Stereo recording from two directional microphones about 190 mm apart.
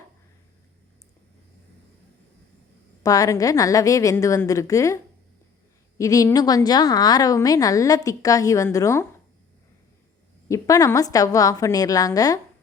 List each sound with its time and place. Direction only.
3.0 s a woman's voice: 20° left (ahead or behind)
6.0 s a woman's voice: 20° left (ahead or behind)
10.5 s a woman's voice: 15° left (ahead or behind)